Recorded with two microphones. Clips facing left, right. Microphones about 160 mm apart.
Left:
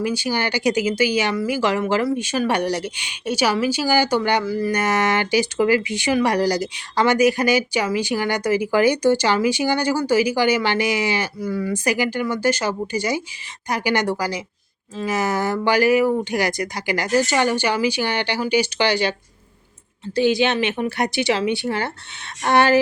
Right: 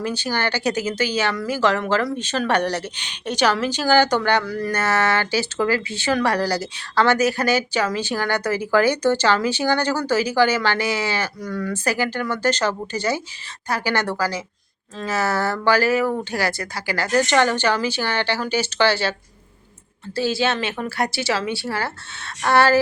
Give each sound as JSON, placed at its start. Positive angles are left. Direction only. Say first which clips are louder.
{"t": 0.0, "sound": "speech", "louder": "left 2 dB", "side_deg": 10}
{"t": 4.7, "sound": "speech", "louder": "right 1 dB", "side_deg": 15}
{"t": 20.1, "sound": "speech", "louder": "left 4 dB", "side_deg": 20}